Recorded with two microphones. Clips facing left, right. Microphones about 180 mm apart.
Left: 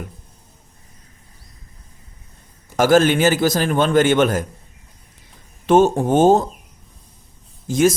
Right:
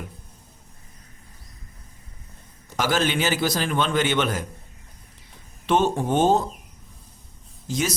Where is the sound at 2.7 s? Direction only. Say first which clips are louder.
Left 9 dB; 45° left (ahead or behind).